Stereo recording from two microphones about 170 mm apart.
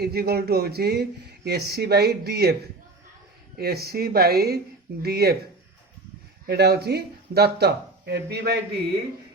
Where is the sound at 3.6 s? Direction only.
65° right (ahead or behind).